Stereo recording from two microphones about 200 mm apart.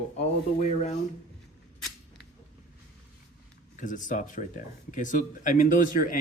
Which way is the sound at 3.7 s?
40° left (ahead or behind).